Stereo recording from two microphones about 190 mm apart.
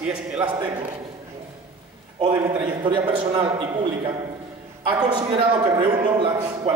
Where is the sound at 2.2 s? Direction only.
25° right (ahead or behind).